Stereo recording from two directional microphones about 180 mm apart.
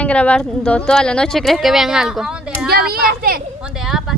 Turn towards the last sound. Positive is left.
turn(degrees=0)  # may be behind; listen again after turning